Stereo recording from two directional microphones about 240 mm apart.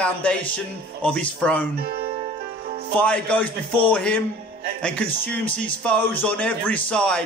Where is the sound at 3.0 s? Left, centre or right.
Centre.